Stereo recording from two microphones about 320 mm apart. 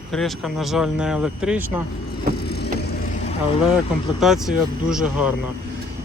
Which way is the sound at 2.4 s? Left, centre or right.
Left.